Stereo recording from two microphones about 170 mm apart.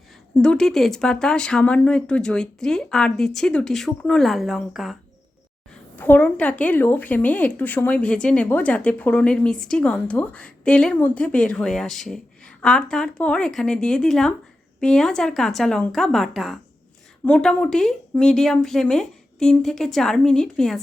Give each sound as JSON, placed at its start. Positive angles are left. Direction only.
{"t": 0.4, "sound": "speech", "side_deg": 5}
{"t": 6.0, "sound": "a woman's voice", "side_deg": 10}